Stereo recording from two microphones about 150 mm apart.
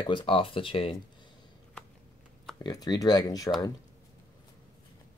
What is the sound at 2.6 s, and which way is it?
Speech, 25° left (ahead or behind).